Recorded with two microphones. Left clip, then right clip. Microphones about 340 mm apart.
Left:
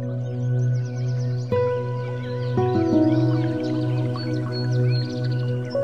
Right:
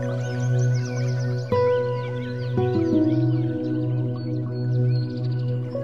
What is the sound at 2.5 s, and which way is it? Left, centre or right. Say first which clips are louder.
Music: left 1 dB; centre.